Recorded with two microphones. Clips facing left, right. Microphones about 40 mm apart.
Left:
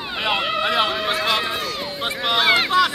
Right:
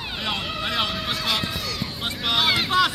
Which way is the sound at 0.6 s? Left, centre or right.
Centre.